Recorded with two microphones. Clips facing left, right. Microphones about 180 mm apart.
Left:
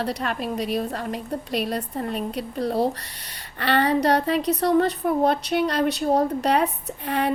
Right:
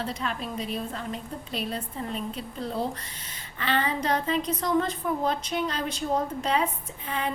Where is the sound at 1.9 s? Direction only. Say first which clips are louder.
Left 6 dB; 60° left (ahead or behind).